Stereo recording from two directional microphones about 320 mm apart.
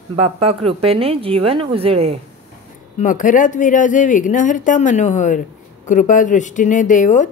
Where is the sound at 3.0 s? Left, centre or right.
Left.